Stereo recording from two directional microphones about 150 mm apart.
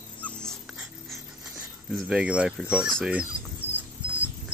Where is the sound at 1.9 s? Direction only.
5° right (ahead or behind).